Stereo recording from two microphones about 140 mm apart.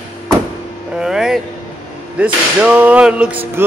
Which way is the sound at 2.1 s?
10° right (ahead or behind).